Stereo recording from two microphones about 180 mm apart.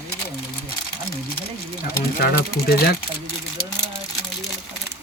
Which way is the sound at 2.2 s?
55° left (ahead or behind).